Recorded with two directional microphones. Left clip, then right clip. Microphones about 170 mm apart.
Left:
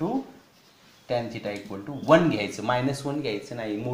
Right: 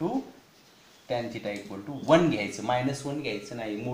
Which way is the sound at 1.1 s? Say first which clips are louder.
Left 3 dB; 20° left (ahead or behind).